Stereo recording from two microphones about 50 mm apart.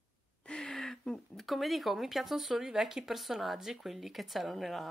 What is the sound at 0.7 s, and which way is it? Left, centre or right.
A woman's voice, centre.